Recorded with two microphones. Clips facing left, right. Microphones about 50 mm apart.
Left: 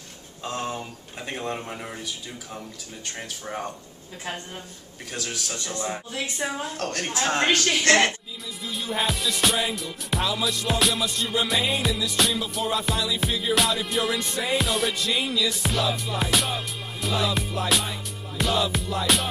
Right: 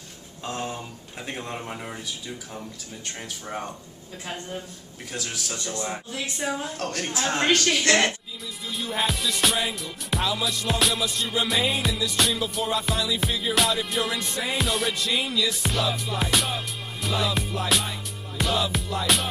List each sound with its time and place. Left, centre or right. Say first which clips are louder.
1.2 s music: left 2 dB; centre
3.2 s music: left 1 dB; centre
5.5 s music: even; centre
5.9 s speech: left 1 dB; centre
8.7 s music: even; centre